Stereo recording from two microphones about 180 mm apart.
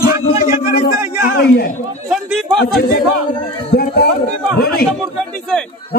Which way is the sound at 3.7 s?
60° left (ahead or behind).